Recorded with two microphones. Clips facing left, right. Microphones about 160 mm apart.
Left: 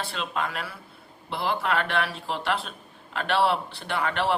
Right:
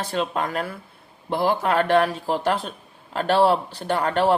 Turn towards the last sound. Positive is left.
turn(degrees=-40)  # may be behind; listen again after turning